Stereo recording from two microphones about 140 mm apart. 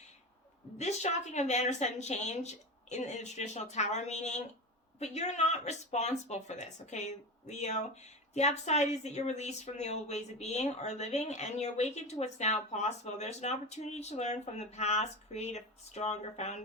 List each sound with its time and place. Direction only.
0.8 s speech: 50° left (ahead or behind)